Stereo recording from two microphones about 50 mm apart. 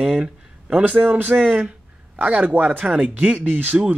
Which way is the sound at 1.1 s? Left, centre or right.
Right.